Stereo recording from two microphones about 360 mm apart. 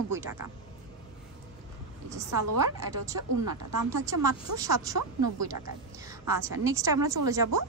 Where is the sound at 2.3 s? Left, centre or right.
Right.